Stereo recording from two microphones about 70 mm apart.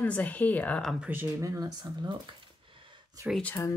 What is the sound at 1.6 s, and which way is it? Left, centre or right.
Speech, right.